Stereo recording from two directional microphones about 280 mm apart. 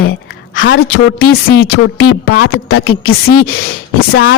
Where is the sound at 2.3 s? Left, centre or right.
Left.